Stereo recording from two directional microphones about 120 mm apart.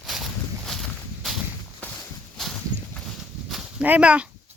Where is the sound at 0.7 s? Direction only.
Centre (ahead or behind).